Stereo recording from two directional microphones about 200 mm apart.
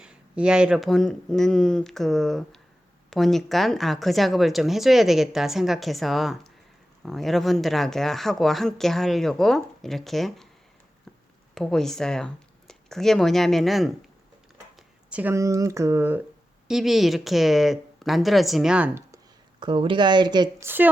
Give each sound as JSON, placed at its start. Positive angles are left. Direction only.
{"t": 0.0, "sound": "speech", "side_deg": -5}
{"t": 11.5, "sound": "speech", "side_deg": 0}
{"t": 15.1, "sound": "speech", "side_deg": -10}
{"t": 19.5, "sound": "speech", "side_deg": -25}